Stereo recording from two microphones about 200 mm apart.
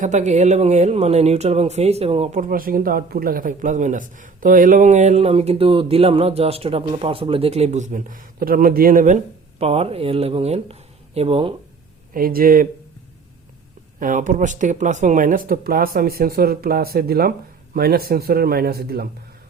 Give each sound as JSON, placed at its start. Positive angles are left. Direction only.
{"t": 0.0, "sound": "speech", "side_deg": -35}
{"t": 12.1, "sound": "speech", "side_deg": -45}
{"t": 14.0, "sound": "speech", "side_deg": -40}